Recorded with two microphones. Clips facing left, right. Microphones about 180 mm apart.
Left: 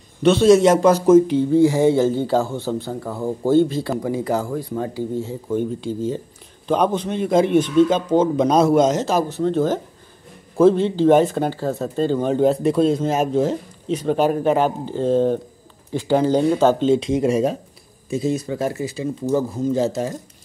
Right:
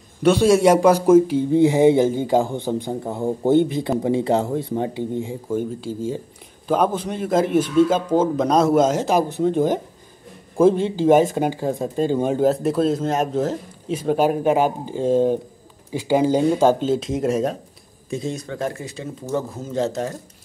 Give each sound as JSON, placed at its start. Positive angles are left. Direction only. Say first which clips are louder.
{"t": 0.2, "sound": "speech", "louder": "left 2 dB", "side_deg": -10}
{"t": 1.5, "sound": "speech", "louder": "right 1 dB", "side_deg": -20}